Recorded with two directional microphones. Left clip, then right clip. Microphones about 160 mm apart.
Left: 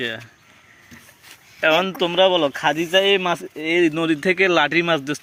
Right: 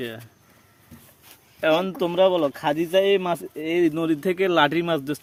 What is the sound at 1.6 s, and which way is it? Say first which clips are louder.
Speech: left 4 dB; 10° left (ahead or behind).